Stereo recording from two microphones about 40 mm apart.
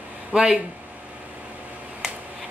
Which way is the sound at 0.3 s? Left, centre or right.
Centre.